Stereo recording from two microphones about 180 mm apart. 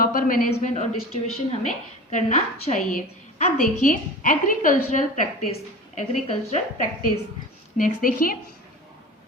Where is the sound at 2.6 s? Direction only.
45° left (ahead or behind).